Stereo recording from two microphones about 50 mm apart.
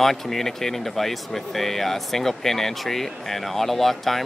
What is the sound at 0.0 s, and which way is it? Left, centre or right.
Speech, centre.